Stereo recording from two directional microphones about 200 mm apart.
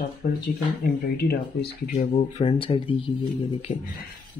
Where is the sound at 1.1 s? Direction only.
55° left (ahead or behind).